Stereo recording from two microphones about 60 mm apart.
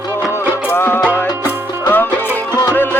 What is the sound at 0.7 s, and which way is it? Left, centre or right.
Music, left.